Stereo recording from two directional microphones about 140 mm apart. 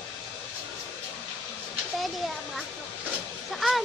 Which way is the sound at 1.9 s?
Centre (ahead or behind).